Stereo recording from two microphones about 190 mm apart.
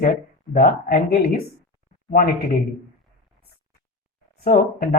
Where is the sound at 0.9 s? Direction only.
55° left (ahead or behind).